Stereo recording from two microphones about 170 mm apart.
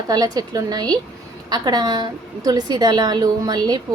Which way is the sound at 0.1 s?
20° right (ahead or behind).